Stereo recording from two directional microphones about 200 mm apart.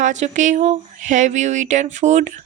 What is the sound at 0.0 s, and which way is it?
Speech, 40° right (ahead or behind).